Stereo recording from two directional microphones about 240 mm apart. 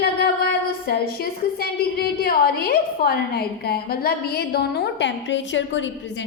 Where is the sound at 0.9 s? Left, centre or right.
Left.